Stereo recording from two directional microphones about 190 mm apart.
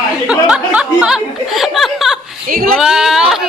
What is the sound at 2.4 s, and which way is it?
Speech, 50° right (ahead or behind).